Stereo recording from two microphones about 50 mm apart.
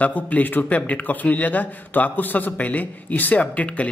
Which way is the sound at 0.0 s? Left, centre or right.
Left.